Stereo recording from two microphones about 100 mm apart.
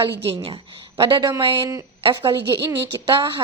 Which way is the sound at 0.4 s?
60° right (ahead or behind).